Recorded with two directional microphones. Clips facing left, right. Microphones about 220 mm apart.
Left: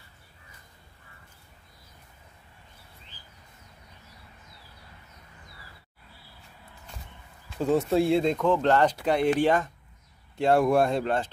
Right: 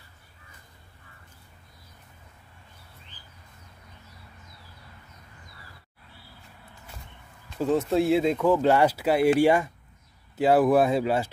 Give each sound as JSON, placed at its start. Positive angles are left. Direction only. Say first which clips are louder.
{"t": 7.4, "sound": "speech", "louder": "even", "side_deg": 0}